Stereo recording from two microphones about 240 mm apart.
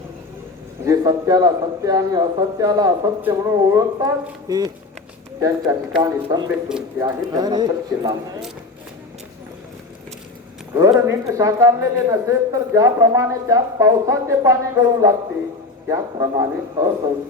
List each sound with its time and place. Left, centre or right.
0.9 s a man's voice: centre
6.7 s a man's voice: centre
7.3 s a man's voice: centre
10.8 s a man's voice: centre